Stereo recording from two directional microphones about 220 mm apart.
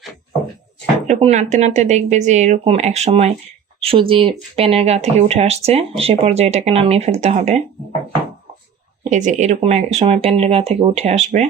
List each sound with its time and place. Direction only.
1.0 s speech: 30° right (ahead or behind)
9.0 s speech: 35° right (ahead or behind)